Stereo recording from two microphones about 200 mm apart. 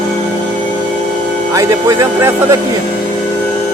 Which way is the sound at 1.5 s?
15° right (ahead or behind).